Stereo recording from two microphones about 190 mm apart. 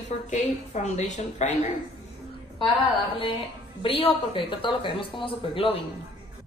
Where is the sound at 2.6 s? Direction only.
30° left (ahead or behind).